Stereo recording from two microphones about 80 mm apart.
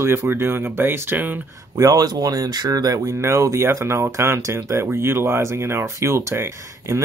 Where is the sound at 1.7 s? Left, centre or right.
Right.